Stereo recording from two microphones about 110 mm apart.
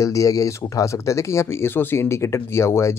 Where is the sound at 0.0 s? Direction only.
30° left (ahead or behind).